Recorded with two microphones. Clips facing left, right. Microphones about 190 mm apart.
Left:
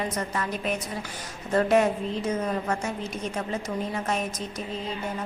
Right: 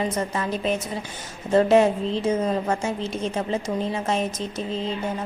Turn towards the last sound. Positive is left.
turn(degrees=-30)  # may be behind; listen again after turning